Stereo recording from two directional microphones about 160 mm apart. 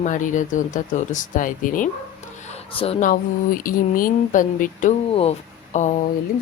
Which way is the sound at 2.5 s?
40° left (ahead or behind).